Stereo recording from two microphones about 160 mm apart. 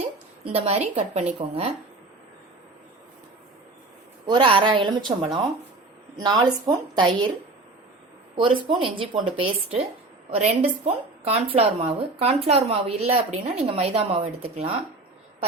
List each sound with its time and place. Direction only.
0.0 s speech: 40° right (ahead or behind)
4.3 s speech: 30° right (ahead or behind)
8.4 s a woman's voice: 30° right (ahead or behind)
10.3 s a woman's voice: 40° right (ahead or behind)